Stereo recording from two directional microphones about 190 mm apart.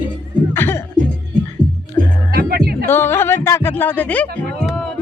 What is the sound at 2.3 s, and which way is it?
Music, 50° right (ahead or behind).